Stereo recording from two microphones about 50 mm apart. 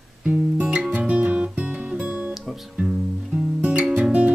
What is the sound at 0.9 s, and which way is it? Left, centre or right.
Guitar, centre.